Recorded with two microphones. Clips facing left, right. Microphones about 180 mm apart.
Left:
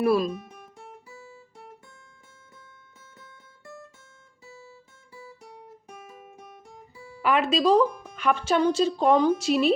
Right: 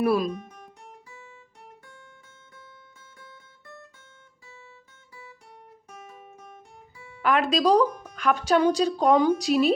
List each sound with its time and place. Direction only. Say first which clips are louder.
0.0 s speech: left 1 dB; 10° right (ahead or behind)
1.1 s guitar: left 2 dB; 35° left (ahead or behind)
4.4 s guitar: left 4 dB; 35° left (ahead or behind)
7.2 s music: even; 5° left (ahead or behind)
7.5 s speech: even; centre (ahead or behind)